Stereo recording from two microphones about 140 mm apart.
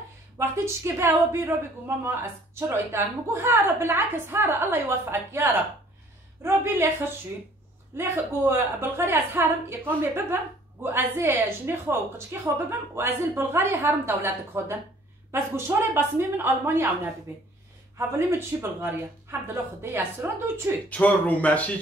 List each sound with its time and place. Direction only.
0.4 s a woman's voice: 15° right (ahead or behind)
3.4 s a woman's voice: 15° right (ahead or behind)
7.9 s a woman's voice: 15° right (ahead or behind)
20.9 s speech: 10° left (ahead or behind)